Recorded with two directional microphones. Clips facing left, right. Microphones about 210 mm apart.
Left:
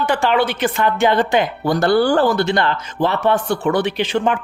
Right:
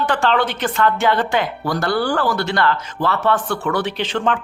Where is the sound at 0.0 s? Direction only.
10° left (ahead or behind).